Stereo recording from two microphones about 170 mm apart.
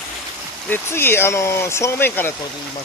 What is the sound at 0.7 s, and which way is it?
Speech, 15° left (ahead or behind).